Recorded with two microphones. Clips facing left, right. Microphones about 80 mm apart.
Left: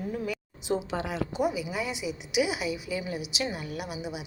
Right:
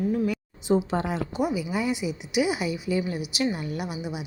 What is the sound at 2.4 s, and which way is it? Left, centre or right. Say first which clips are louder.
A woman's voice: right 3 dB; centre.